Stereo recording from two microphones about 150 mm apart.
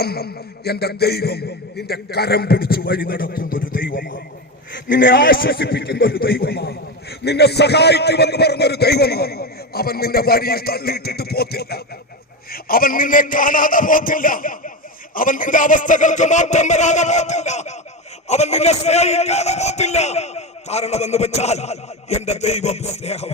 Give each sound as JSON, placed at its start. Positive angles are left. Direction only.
{"t": 0.0, "sound": "a man's voice", "side_deg": 90}
{"t": 12.5, "sound": "a man's voice", "side_deg": 75}